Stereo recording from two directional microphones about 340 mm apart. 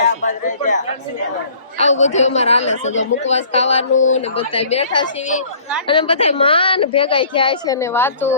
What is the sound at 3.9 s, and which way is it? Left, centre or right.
Speech, left.